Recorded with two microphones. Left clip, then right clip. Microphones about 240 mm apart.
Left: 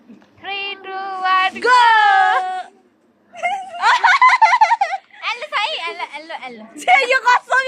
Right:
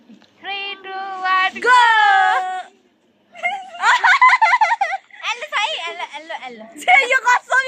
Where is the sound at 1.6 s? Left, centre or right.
Centre.